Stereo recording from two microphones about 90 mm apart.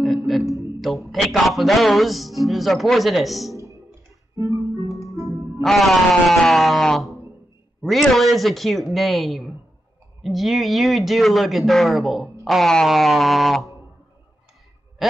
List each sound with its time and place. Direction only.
0.6 s music: centre (ahead or behind)
4.4 s guitar: 35° right (ahead or behind)
4.8 s music: 35° left (ahead or behind)
5.1 s music: 35° right (ahead or behind)
5.6 s music: centre (ahead or behind)
7.8 s speech: centre (ahead or behind)
15.0 s a sound: centre (ahead or behind)